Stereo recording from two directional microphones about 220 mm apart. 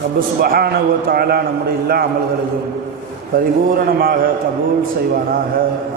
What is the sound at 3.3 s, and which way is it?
A man's voice, 40° right (ahead or behind).